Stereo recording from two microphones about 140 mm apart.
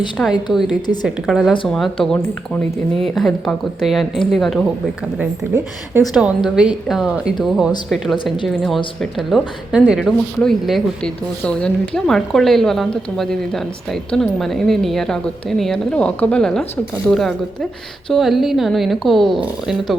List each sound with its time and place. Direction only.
0.2 s a woman's voice: 10° left (ahead or behind)
0.5 s speech: 5° right (ahead or behind)
6.0 s speech: 5° right (ahead or behind)
8.1 s a woman's voice: 35° left (ahead or behind)
8.4 s speech: centre (ahead or behind)